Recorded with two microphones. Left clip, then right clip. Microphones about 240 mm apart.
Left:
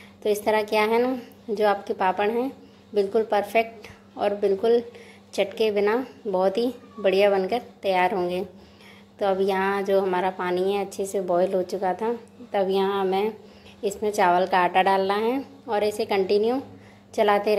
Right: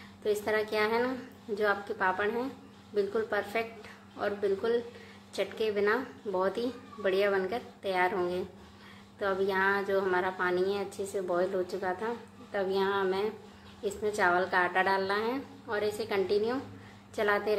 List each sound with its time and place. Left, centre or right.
0.2 s a woman's voice: left